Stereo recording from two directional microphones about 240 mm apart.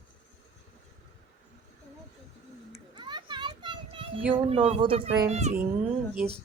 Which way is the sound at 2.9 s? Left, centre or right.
Centre.